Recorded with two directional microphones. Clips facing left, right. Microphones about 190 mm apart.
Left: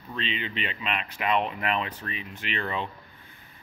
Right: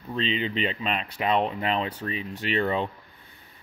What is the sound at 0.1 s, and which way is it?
Speech, 35° right (ahead or behind).